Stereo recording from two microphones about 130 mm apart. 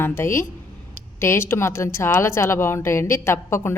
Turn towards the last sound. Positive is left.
turn(degrees=20)  # may be behind; listen again after turning